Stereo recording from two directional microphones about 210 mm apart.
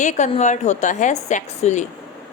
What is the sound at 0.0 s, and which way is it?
Speech, 35° left (ahead or behind).